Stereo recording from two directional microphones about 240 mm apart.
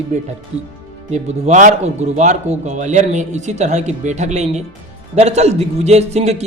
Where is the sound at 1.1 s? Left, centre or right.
Right.